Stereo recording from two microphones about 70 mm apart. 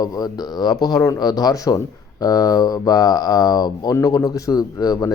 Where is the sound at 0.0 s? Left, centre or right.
Left.